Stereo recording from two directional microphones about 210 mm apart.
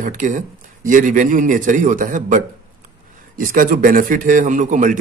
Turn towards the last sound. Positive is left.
turn(degrees=-35)  # may be behind; listen again after turning